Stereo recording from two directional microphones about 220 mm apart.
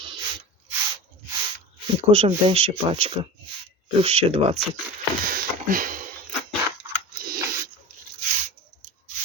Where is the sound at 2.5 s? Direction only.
25° right (ahead or behind).